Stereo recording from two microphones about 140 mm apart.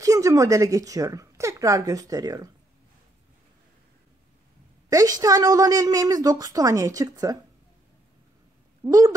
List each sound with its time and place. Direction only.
0.0 s a woman's voice: 25° right (ahead or behind)
4.8 s a woman's voice: 25° right (ahead or behind)
8.8 s a woman's voice: 20° right (ahead or behind)